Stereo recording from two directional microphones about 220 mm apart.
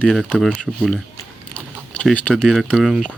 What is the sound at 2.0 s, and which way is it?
Speech, centre (ahead or behind).